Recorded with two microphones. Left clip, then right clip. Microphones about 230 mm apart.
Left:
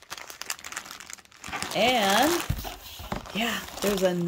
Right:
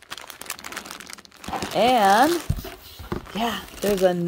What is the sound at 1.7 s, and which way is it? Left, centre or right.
Speech, centre.